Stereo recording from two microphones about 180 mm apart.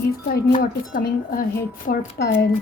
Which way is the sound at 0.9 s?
55° left (ahead or behind).